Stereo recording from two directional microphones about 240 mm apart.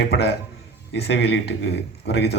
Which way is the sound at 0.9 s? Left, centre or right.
Left.